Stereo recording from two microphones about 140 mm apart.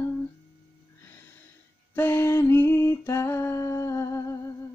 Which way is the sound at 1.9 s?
15° left (ahead or behind).